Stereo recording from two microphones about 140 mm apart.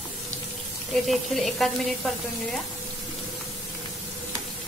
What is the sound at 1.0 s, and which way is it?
Speech, centre (ahead or behind).